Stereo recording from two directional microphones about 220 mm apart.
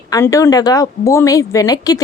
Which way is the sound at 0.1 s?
15° left (ahead or behind).